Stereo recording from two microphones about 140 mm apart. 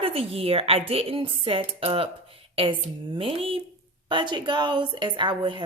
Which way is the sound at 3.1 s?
40° right (ahead or behind).